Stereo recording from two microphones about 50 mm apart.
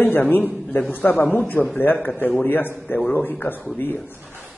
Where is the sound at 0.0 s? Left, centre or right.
Left.